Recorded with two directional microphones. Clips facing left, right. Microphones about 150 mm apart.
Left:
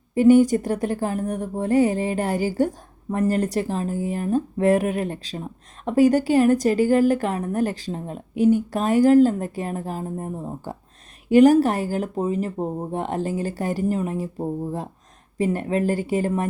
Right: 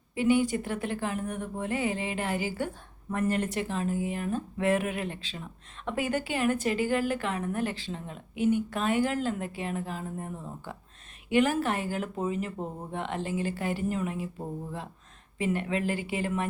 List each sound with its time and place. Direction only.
0.1 s speech: 45° left (ahead or behind)